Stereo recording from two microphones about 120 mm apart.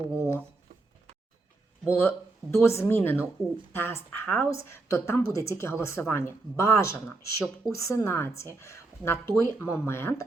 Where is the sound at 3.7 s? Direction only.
20° left (ahead or behind).